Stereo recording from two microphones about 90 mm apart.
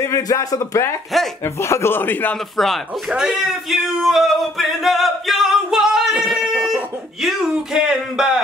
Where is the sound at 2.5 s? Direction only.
Centre (ahead or behind).